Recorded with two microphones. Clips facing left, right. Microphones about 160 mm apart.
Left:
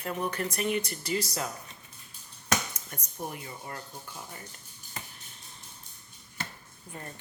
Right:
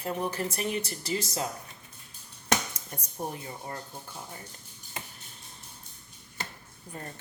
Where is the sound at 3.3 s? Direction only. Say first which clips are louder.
Right 2 dB; 30° right (ahead or behind).